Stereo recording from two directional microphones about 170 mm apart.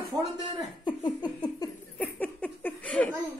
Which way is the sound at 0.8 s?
25° left (ahead or behind).